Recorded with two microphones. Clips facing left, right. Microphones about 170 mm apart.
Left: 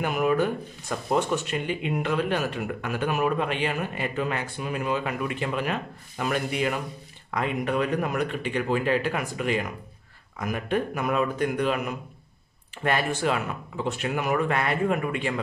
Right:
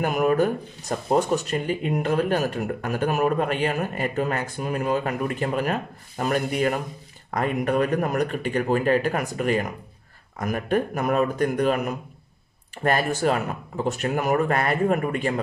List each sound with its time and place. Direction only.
0.0 s speech: 45° right (ahead or behind)
12.8 s speech: 40° right (ahead or behind)